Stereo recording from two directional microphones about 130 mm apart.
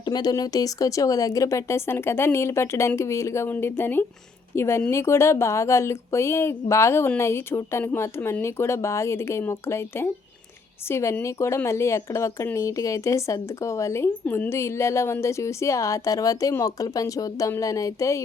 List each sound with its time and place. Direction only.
0.0 s speech: 30° left (ahead or behind)